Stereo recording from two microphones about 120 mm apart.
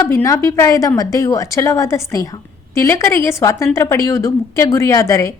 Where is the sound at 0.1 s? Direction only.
25° left (ahead or behind).